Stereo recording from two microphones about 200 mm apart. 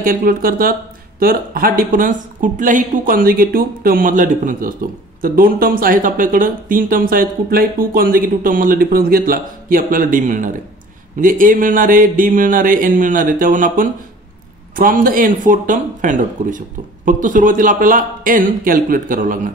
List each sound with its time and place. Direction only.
0.0 s speech: 45° right (ahead or behind)